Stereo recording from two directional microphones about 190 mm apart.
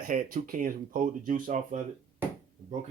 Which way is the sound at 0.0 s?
45° right (ahead or behind).